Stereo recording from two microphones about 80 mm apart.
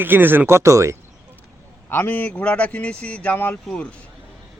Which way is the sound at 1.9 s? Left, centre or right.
Left.